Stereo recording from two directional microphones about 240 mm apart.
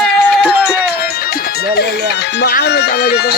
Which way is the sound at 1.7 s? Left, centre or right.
Left.